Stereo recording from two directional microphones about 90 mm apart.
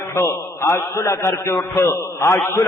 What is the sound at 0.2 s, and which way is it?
A man's voice, 30° left (ahead or behind).